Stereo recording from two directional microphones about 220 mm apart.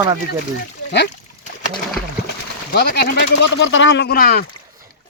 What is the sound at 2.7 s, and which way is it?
Speech, 50° left (ahead or behind).